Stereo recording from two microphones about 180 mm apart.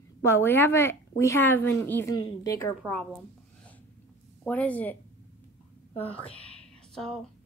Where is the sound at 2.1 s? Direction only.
20° left (ahead or behind).